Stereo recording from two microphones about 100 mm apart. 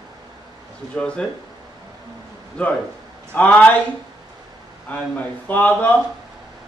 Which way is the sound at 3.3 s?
15° left (ahead or behind).